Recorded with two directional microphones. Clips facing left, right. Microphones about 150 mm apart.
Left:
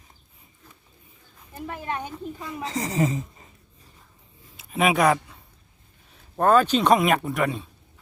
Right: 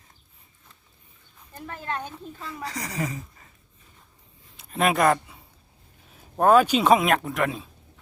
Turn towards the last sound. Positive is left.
turn(degrees=0)  # may be behind; listen again after turning